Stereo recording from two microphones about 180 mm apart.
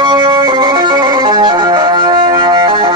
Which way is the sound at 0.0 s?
25° right (ahead or behind).